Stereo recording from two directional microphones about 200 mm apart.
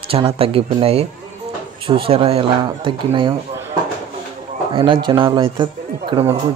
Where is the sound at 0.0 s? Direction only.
25° right (ahead or behind).